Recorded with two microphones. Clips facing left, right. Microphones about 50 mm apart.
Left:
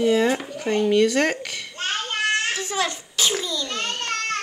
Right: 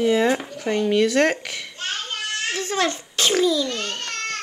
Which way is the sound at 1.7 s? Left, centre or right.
Left.